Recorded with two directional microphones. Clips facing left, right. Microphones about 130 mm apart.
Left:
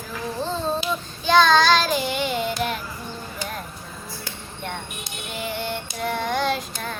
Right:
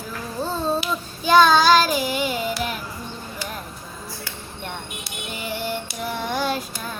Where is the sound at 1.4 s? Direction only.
10° right (ahead or behind).